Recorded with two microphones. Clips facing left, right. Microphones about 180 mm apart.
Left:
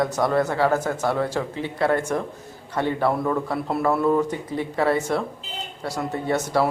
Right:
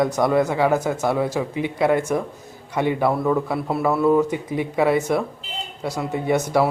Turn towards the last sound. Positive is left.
turn(degrees=-10)  # may be behind; listen again after turning